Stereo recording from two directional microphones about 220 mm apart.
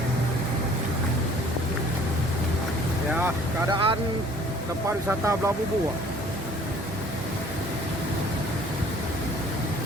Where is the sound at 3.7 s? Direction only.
20° right (ahead or behind).